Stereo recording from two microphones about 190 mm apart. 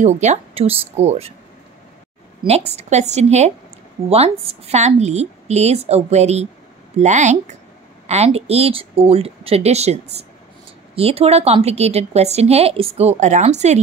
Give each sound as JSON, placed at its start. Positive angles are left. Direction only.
{"t": 0.0, "sound": "a woman's voice", "side_deg": -35}
{"t": 2.4, "sound": "a woman's voice", "side_deg": -35}